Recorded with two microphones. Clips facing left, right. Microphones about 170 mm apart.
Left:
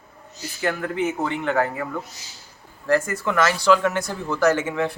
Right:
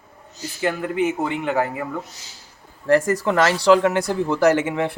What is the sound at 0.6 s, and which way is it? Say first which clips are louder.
Speech: right 2 dB; 15° right (ahead or behind).